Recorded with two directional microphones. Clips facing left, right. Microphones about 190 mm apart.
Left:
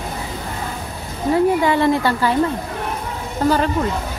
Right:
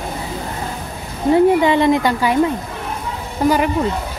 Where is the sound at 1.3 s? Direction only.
20° right (ahead or behind).